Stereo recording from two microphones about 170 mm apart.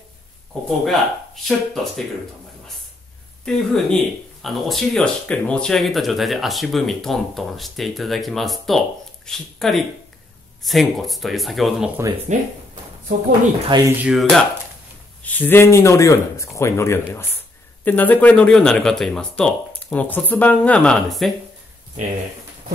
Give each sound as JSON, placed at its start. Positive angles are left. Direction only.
{"t": 0.7, "sound": "speech", "side_deg": 0}
{"t": 3.4, "sound": "speech", "side_deg": 0}
{"t": 12.3, "sound": "speech", "side_deg": -45}
{"t": 13.7, "sound": "speech", "side_deg": -25}
{"t": 14.0, "sound": "speech", "side_deg": 0}
{"t": 15.2, "sound": "speech", "side_deg": 10}